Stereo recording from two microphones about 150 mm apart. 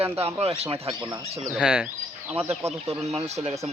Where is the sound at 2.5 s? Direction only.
45° right (ahead or behind).